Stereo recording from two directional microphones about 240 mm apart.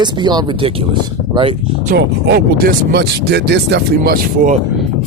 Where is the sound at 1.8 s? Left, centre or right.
Right.